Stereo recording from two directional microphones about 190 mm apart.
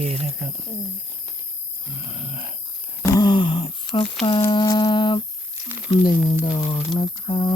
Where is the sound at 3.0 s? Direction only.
20° left (ahead or behind).